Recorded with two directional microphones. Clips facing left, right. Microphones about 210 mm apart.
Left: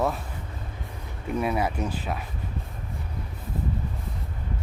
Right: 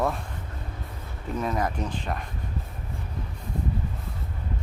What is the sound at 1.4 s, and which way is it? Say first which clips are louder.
Speech: left 1 dB; 10° left (ahead or behind).